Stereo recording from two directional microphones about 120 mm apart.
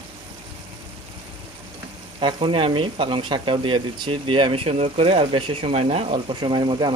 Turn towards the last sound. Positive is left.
turn(degrees=-40)  # may be behind; listen again after turning